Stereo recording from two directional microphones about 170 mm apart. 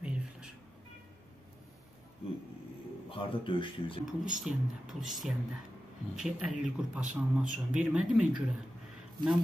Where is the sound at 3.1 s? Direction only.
30° left (ahead or behind).